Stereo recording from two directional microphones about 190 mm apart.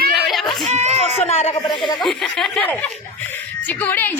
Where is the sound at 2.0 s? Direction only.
Centre (ahead or behind).